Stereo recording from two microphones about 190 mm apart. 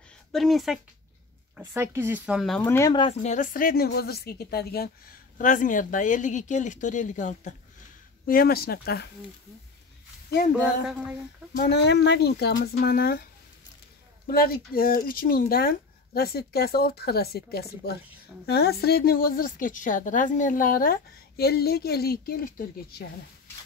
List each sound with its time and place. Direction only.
0.3 s a woman's voice: centre (ahead or behind)
1.6 s speech: 10° right (ahead or behind)
2.6 s speech: 15° left (ahead or behind)
2.9 s speech: 25° left (ahead or behind)
3.2 s a woman's voice: 40° left (ahead or behind)
8.3 s a woman's voice: 50° left (ahead or behind)
11.6 s a woman's voice: 60° left (ahead or behind)